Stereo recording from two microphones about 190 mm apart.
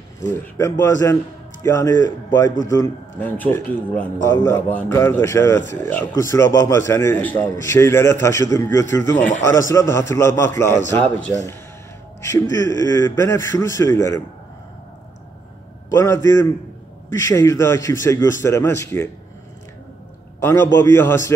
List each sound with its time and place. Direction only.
0.3 s a man's voice: 15° left (ahead or behind)
15.9 s a man's voice: 15° left (ahead or behind)
20.3 s a man's voice: 15° left (ahead or behind)